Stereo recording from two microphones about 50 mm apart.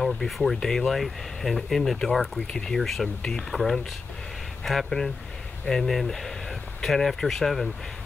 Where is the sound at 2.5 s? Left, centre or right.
Centre.